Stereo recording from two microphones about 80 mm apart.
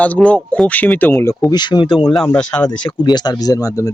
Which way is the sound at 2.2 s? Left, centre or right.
Centre.